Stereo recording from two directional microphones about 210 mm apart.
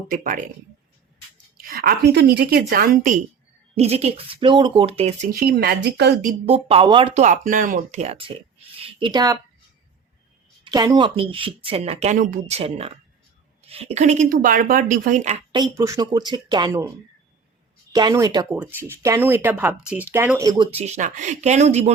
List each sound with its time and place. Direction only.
0.1 s speech: 40° right (ahead or behind)
1.5 s a woman's voice: 45° right (ahead or behind)
3.8 s speech: 30° right (ahead or behind)
5.3 s speech: 45° right (ahead or behind)
6.4 s speech: 30° right (ahead or behind)
10.6 s speech: 20° right (ahead or behind); by 15.4 s 35° right (ahead or behind)
15.7 s speech: 15° right (ahead or behind)
17.9 s speech: 15° right (ahead or behind)
20.4 s speech: 20° right (ahead or behind)